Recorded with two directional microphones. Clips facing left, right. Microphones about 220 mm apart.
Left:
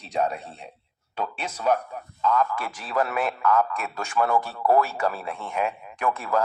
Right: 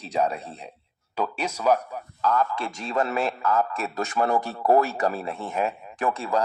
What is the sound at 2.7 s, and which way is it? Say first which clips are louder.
A man's voice: right 1 dB; 25° right (ahead or behind).